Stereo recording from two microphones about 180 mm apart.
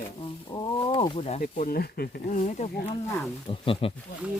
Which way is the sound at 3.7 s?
30° left (ahead or behind).